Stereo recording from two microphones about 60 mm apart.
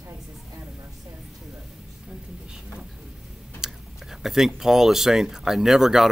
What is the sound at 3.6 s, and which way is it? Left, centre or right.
Speech, centre.